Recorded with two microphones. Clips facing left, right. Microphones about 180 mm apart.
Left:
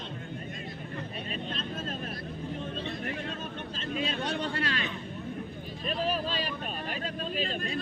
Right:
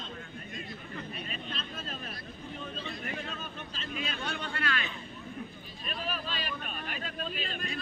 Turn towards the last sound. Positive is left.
turn(degrees=35)  # may be behind; listen again after turning